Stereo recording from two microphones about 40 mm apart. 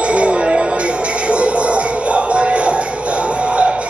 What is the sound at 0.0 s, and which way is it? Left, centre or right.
Music, right.